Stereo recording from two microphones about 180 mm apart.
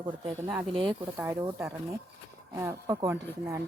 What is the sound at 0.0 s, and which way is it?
Speech, 25° right (ahead or behind).